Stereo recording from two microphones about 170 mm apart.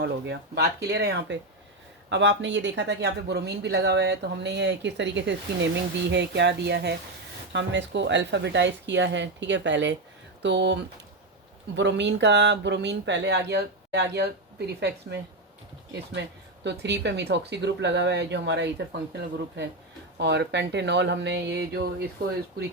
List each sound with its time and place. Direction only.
0.0 s speech: 90° right; by 6.9 s 75° right (ahead or behind)
7.5 s a woman's voice: 90° right
16.6 s speech: 90° right
20.1 s speech: 90° right